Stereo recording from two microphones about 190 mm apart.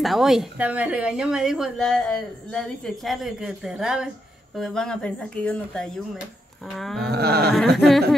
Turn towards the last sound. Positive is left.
turn(degrees=0)  # may be behind; listen again after turning